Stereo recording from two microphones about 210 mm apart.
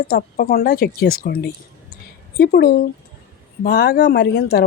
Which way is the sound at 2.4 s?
50° left (ahead or behind).